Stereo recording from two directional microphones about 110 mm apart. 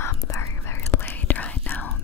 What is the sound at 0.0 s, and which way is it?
Whispering, 30° left (ahead or behind).